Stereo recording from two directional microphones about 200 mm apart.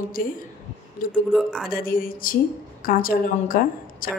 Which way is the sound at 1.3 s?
Centre (ahead or behind).